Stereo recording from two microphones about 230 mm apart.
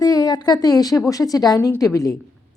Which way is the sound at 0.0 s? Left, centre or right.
Centre.